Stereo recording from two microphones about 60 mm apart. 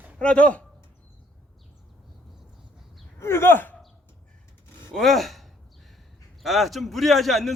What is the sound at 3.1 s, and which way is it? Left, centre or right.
Speech, left.